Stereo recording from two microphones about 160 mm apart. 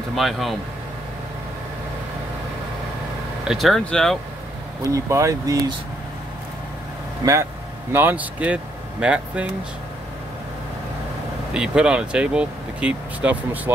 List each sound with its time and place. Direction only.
0.1 s speech: centre (ahead or behind)
3.4 s speech: centre (ahead or behind)
4.8 s speech: 20° right (ahead or behind)
7.9 s speech: 10° right (ahead or behind)
11.5 s speech: 5° right (ahead or behind)